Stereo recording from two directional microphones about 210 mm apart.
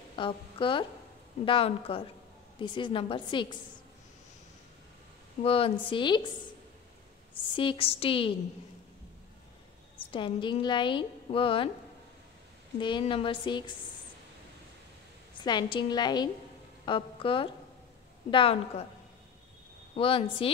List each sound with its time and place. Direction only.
0.1 s a woman's voice: 25° left (ahead or behind)
5.4 s a woman's voice: 25° left (ahead or behind)
7.5 s a woman's voice: 25° left (ahead or behind)
9.9 s a woman's voice: 25° left (ahead or behind)
12.7 s a woman's voice: 20° left (ahead or behind)
15.4 s a woman's voice: 20° left (ahead or behind)
20.0 s a woman's voice: 25° left (ahead or behind)